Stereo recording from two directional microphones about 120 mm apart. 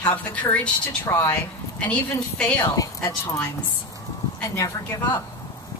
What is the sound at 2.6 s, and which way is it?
Speech, 30° left (ahead or behind).